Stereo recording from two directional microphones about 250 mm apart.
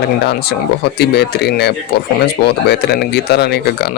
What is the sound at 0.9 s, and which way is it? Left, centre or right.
Speech, left.